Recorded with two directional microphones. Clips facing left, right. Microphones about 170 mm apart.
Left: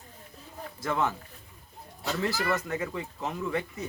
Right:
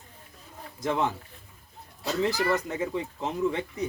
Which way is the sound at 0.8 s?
20° right (ahead or behind).